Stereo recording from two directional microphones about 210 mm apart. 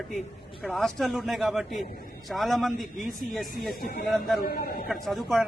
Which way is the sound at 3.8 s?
45° left (ahead or behind).